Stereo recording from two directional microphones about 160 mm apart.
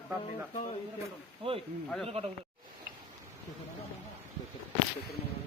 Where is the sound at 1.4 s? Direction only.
35° right (ahead or behind).